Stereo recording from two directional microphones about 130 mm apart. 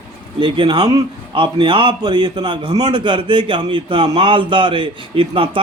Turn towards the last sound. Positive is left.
turn(degrees=-45)  # may be behind; listen again after turning